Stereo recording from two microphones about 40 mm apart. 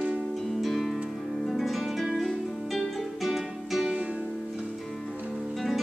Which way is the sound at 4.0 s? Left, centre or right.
Right.